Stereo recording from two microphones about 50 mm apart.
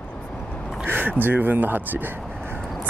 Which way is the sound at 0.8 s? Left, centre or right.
Right.